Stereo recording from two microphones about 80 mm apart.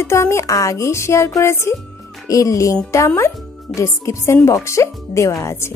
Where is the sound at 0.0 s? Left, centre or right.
Left.